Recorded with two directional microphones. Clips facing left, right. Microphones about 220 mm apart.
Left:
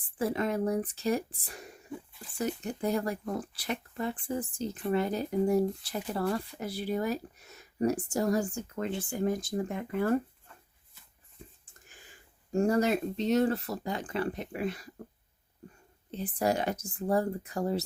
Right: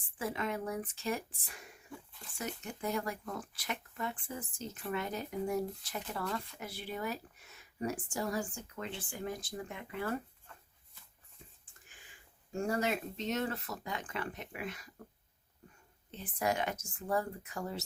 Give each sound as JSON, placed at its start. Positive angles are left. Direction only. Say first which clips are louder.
{"t": 0.2, "sound": "speech", "louder": "left 7 dB", "side_deg": 35}
{"t": 12.5, "sound": "speech", "louder": "left 8 dB", "side_deg": 40}
{"t": 16.1, "sound": "speech", "louder": "left 5 dB", "side_deg": 35}